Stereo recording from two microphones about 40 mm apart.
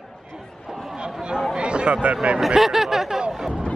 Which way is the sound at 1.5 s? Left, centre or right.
Right.